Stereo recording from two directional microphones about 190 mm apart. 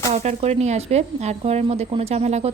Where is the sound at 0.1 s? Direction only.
35° right (ahead or behind).